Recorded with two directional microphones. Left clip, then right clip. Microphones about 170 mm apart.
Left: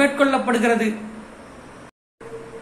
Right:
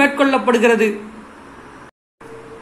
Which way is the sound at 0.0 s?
30° right (ahead or behind).